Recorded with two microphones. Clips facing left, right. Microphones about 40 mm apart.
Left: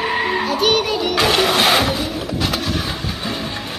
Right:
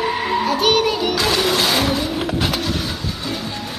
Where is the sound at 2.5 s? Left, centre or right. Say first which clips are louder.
Even; centre.